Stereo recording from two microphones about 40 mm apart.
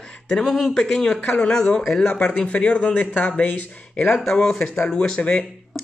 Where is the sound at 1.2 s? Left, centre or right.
Left.